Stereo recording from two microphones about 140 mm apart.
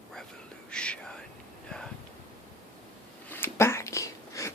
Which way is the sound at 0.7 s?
5° left (ahead or behind).